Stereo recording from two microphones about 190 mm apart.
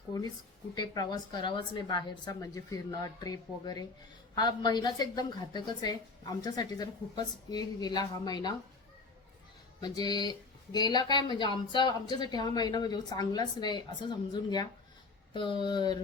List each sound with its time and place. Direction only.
0.8 s speech: 20° left (ahead or behind)
9.8 s speech: 20° left (ahead or behind)